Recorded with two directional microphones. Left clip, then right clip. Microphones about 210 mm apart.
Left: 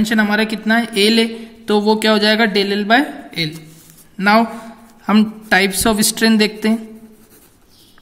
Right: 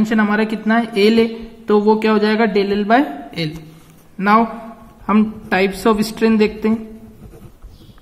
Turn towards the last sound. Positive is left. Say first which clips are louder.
# even
turn(degrees=50)  # may be behind; listen again after turning